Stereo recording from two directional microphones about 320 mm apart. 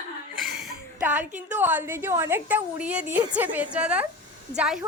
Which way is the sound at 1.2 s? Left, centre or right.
Right.